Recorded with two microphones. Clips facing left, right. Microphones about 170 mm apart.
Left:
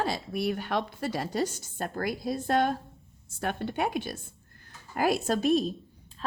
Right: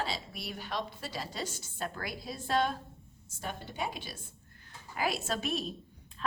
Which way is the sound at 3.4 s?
65° left (ahead or behind).